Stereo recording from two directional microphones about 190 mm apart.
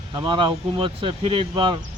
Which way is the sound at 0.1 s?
25° right (ahead or behind).